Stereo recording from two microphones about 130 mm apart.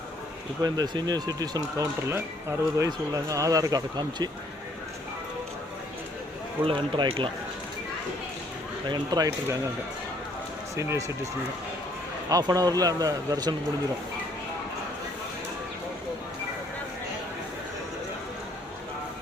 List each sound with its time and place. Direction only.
0.6 s speech: 30° right (ahead or behind)
6.7 s speech: 40° right (ahead or behind)
8.9 s speech: 30° right (ahead or behind)
10.8 s speech: 25° right (ahead or behind)
12.3 s speech: 30° right (ahead or behind)